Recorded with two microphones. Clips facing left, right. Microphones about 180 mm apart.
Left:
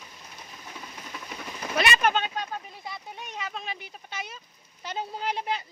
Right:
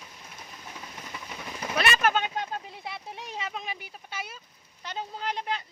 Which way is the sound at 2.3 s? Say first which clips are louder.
Right 1 dB; 25° right (ahead or behind).